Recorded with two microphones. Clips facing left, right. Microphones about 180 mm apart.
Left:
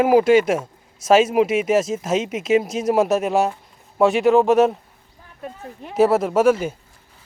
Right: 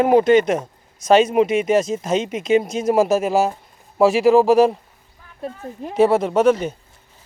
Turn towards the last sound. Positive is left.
turn(degrees=5)  # may be behind; listen again after turning